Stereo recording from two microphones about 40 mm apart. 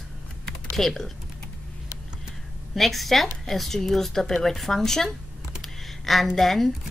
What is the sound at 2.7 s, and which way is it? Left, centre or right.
Speech, centre.